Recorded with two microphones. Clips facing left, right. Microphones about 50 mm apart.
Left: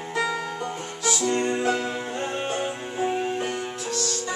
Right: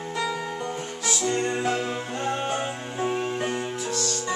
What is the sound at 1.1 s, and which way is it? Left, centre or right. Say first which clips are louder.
Music: left 1 dB; centre.